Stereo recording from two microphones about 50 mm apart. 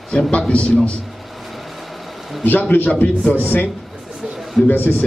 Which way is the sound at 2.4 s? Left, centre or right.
Left.